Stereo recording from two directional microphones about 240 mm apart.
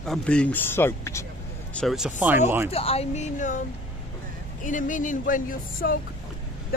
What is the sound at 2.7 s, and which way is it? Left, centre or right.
Speech, left.